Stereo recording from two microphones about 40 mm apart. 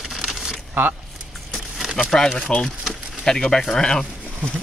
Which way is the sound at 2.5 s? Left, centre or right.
Left.